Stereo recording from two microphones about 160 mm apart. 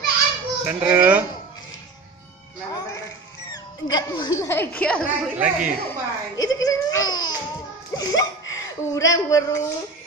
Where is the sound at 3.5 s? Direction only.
25° left (ahead or behind); by 5.3 s 5° left (ahead or behind).